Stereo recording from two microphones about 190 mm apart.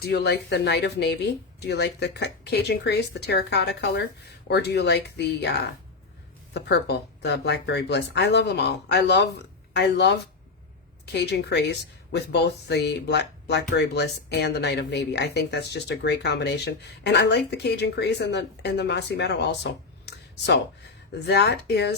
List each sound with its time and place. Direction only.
0.0 s speech: 60° left (ahead or behind)